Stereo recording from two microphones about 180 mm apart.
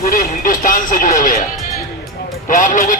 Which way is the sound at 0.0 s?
50° left (ahead or behind).